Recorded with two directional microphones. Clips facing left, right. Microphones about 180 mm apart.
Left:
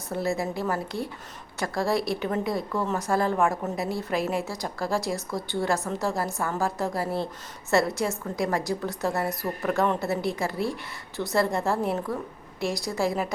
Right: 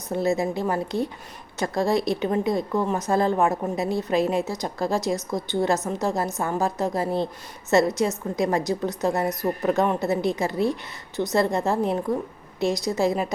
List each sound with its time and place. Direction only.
0.1 s a woman's voice: 20° right (ahead or behind)